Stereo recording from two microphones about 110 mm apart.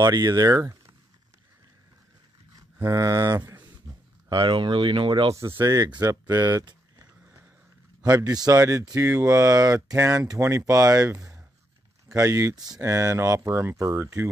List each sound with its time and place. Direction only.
0.0 s speech: 35° right (ahead or behind)
2.5 s mantra: 30° right (ahead or behind)
3.3 s a sound: 20° right (ahead or behind)
4.3 s speech: 45° right (ahead or behind)
5.6 s speech: 35° right (ahead or behind)
8.0 s speech: 35° right (ahead or behind)